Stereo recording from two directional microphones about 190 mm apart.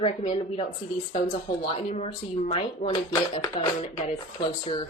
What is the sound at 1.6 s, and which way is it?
A woman's voice, 30° left (ahead or behind).